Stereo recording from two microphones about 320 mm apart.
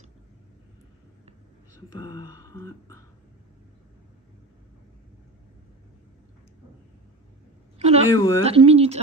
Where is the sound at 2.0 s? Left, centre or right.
Centre.